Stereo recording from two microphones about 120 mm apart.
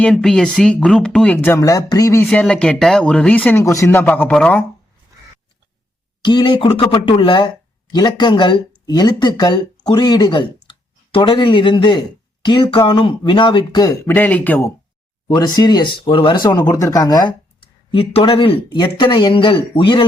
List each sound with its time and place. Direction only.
0.0 s speech: 5° left (ahead or behind); by 2.2 s 30° left (ahead or behind)
2.2 s speech: 5° left (ahead or behind)
3.6 s a man's voice: 25° left (ahead or behind); by 4.6 s 10° left (ahead or behind)
6.2 s speech: 40° left (ahead or behind)
14.1 s speech: 15° left (ahead or behind)
15.4 s speech: 35° left (ahead or behind)
17.9 s speech: 50° left (ahead or behind)